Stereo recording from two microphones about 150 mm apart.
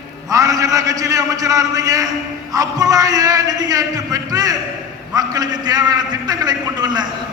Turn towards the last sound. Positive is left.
turn(degrees=-30)  # may be behind; listen again after turning